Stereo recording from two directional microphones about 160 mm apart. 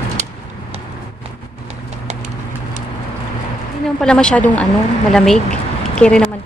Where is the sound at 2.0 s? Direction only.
45° right (ahead or behind).